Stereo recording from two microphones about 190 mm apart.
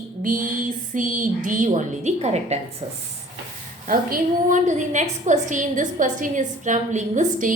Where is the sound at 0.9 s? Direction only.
45° right (ahead or behind).